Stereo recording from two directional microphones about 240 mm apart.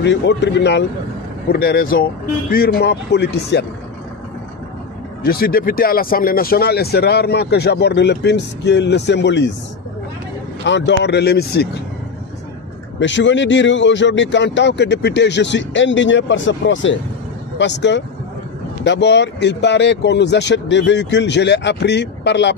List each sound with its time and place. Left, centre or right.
0.0 s a man's voice: left
5.2 s speech: left
10.6 s speech: left
13.0 s speech: left